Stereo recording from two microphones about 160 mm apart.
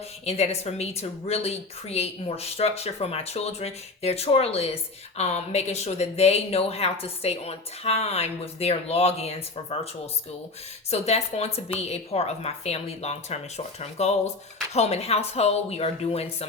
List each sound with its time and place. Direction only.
0.3 s a woman's voice: 40° left (ahead or behind)
10.9 s a woman's voice: 45° left (ahead or behind)